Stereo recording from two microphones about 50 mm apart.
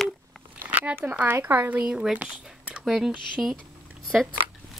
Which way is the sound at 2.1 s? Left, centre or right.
Right.